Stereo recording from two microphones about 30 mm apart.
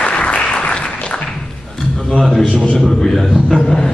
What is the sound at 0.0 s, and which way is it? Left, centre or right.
Applause, left.